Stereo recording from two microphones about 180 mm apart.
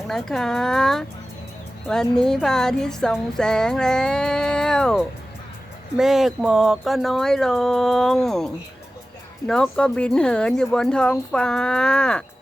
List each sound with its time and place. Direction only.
0.1 s speech: centre (ahead or behind)
9.5 s speech: 5° left (ahead or behind)